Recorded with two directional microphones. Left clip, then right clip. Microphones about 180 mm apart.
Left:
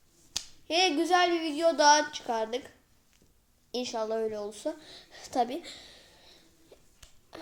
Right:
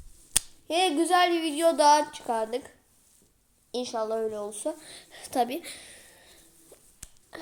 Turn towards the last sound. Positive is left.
turn(degrees=-20)  # may be behind; listen again after turning